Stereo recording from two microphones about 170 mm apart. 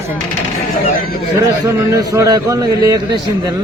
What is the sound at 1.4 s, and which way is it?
A man's voice, 15° right (ahead or behind).